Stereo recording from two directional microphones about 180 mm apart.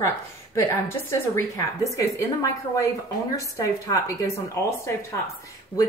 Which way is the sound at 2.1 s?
15° left (ahead or behind).